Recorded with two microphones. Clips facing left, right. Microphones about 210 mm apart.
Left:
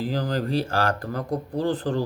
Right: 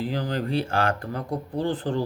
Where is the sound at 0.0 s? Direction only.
40° left (ahead or behind).